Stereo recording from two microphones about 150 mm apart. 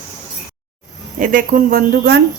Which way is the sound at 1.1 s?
60° right (ahead or behind).